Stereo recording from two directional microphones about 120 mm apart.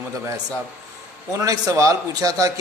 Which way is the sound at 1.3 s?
30° right (ahead or behind).